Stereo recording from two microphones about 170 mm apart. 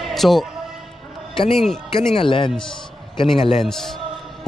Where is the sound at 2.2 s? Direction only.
30° left (ahead or behind).